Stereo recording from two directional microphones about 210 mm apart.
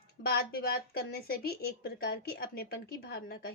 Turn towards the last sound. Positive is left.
turn(degrees=50)  # may be behind; listen again after turning